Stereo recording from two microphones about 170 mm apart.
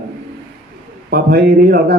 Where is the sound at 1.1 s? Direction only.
65° right (ahead or behind).